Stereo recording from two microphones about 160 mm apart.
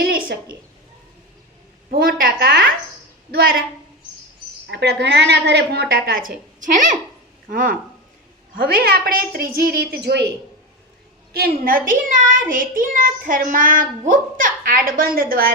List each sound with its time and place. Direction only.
0.0 s a sound: 65° right (ahead or behind)
1.9 s a child's voice: 65° right (ahead or behind)
4.7 s a woman's voice: 90° right; by 6.3 s 65° right (ahead or behind)
7.4 s a woman's voice: 60° right (ahead or behind); by 10.2 s 90° right
11.3 s a child's voice: 65° right (ahead or behind)